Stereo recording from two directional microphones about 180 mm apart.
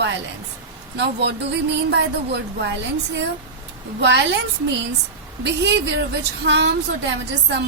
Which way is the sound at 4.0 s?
75° right (ahead or behind).